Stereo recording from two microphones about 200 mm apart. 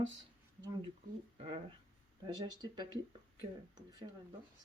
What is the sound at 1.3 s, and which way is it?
Speech, 30° right (ahead or behind).